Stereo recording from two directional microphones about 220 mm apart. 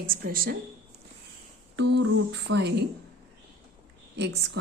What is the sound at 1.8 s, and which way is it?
Speech, 50° right (ahead or behind).